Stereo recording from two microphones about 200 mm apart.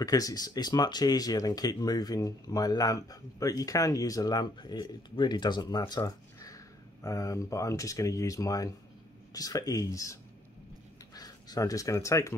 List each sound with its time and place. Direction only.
0.0 s speech: 20° left (ahead or behind)
11.1 s speech: 20° left (ahead or behind)